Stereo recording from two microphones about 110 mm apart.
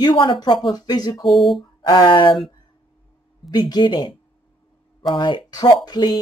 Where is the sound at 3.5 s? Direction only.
40° left (ahead or behind).